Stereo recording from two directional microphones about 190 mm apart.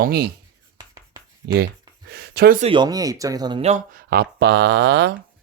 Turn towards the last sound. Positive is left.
turn(degrees=-60)  # may be behind; listen again after turning